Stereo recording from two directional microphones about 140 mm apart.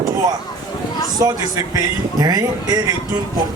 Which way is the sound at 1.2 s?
25° right (ahead or behind).